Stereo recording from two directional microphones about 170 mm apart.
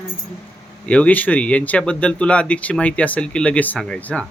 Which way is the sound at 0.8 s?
10° left (ahead or behind).